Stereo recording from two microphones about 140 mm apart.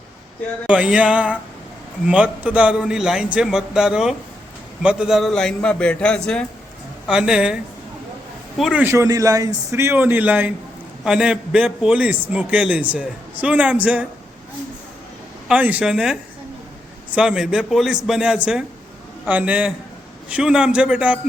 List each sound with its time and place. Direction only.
0.7 s a man's voice: 10° right (ahead or behind)
7.1 s a man's voice: 5° right (ahead or behind)
8.8 s a man's voice: 20° right (ahead or behind)
15.4 s a man's voice: 10° right (ahead or behind)